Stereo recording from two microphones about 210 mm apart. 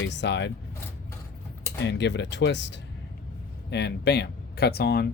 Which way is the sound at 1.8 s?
55° left (ahead or behind).